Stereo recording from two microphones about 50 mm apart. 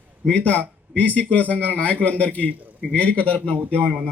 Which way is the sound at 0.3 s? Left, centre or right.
Left.